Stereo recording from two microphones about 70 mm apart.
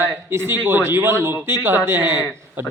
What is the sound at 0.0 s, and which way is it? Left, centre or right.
Speech, right.